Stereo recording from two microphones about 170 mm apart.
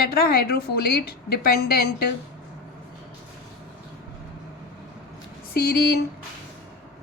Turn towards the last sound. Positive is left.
turn(degrees=65)  # may be behind; listen again after turning